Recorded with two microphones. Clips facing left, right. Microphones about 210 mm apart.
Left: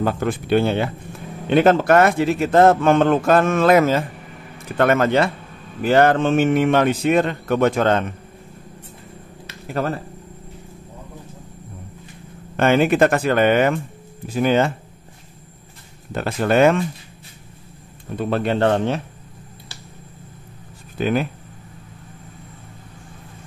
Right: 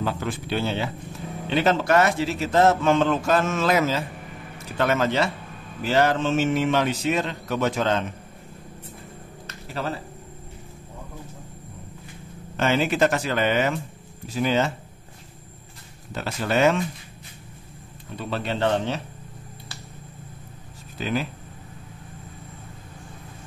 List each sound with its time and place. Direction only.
0.0 s speech: 50° left (ahead or behind)
9.7 s speech: 55° left (ahead or behind)
12.5 s speech: 55° left (ahead or behind)
16.1 s speech: 55° left (ahead or behind)
18.1 s speech: 50° left (ahead or behind)
21.0 s speech: 55° left (ahead or behind)